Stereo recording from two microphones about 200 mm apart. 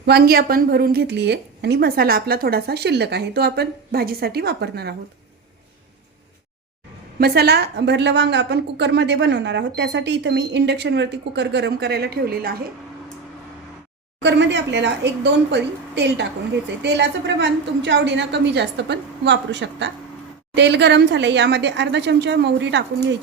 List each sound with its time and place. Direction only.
0.0 s a woman's voice: 50° right (ahead or behind)
7.2 s a woman's voice: 55° right (ahead or behind)
14.2 s a woman's voice: 60° right (ahead or behind)